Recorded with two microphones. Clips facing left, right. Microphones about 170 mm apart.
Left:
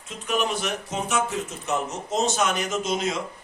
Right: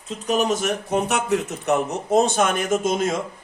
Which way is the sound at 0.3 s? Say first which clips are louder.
Right 5 dB; 40° right (ahead or behind).